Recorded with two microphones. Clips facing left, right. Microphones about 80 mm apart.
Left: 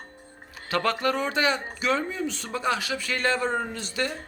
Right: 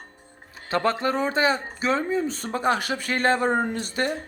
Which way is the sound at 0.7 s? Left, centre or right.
Right.